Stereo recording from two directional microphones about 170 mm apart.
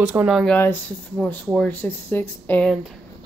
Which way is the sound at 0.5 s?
10° left (ahead or behind).